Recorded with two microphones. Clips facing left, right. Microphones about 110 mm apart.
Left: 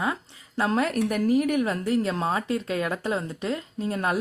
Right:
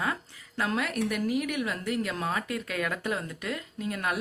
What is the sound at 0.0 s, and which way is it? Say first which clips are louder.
A woman's voice: left 3 dB; 25° left (ahead or behind).